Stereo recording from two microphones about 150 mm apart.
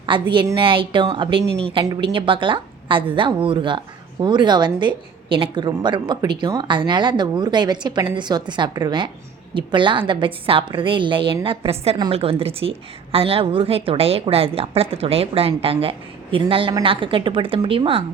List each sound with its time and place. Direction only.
0.0 s a woman's voice: 30° right (ahead or behind)